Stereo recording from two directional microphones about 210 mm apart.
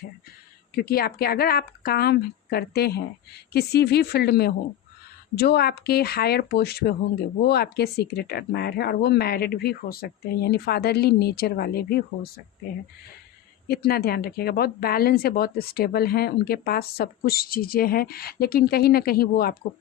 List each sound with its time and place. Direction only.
0.8 s speech: 45° left (ahead or behind)
13.7 s speech: 45° left (ahead or behind)